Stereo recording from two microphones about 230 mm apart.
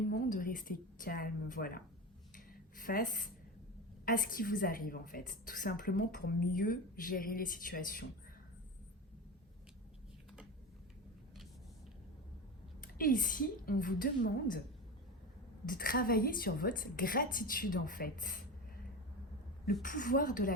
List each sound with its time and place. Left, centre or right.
0.1 s a woman's voice: left
2.3 s a sound: left
4.0 s a woman's voice: left
12.8 s a woman's voice: left
15.6 s a woman's voice: left
19.8 s a woman's voice: left